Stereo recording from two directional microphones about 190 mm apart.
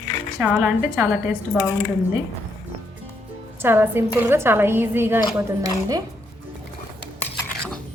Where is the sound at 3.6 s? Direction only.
10° right (ahead or behind).